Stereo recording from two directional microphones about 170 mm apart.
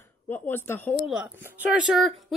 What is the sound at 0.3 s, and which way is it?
Speech, 15° left (ahead or behind).